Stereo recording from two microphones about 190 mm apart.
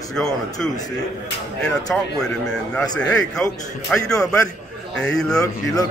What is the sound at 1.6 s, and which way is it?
A man's voice, 5° left (ahead or behind).